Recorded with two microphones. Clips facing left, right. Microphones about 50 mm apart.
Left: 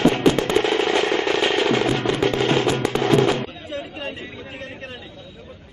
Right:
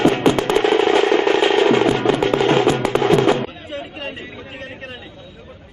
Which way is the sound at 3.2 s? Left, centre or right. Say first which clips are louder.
Right 4 dB; centre.